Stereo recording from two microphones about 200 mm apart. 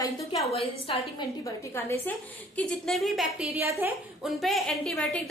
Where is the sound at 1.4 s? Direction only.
10° left (ahead or behind).